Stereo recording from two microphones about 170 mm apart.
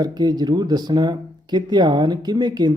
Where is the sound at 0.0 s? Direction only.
25° right (ahead or behind).